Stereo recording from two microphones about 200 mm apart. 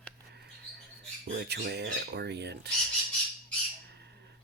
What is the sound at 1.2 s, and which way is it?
Squawk, 55° right (ahead or behind).